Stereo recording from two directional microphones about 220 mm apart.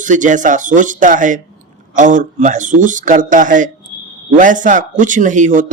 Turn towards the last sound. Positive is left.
turn(degrees=-35)  # may be behind; listen again after turning